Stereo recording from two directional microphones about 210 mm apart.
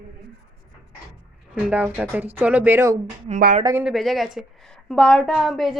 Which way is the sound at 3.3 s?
40° right (ahead or behind).